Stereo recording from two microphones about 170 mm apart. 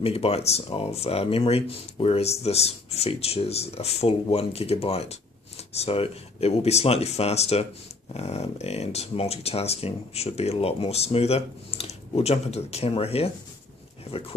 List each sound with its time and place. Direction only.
0.0 s speech: 35° left (ahead or behind)